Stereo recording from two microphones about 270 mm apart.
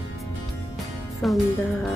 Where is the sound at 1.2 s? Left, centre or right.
Centre.